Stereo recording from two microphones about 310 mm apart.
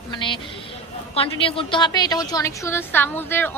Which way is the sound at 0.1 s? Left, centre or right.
Centre.